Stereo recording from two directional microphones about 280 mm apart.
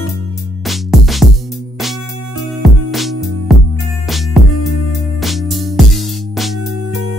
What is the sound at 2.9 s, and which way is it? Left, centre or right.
Music, centre.